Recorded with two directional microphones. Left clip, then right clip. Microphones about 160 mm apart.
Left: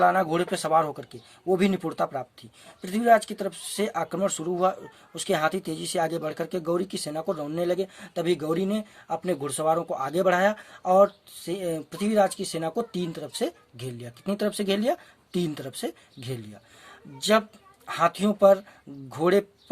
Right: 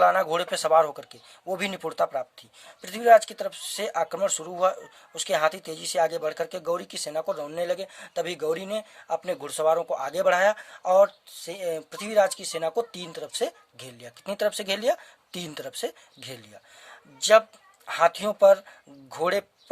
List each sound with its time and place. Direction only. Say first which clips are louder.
0.0 s speech: right 1 dB; 40° right (ahead or behind)